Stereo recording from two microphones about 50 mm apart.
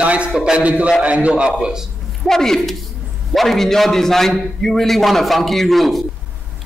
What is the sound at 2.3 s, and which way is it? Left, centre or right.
A woman's voice, centre.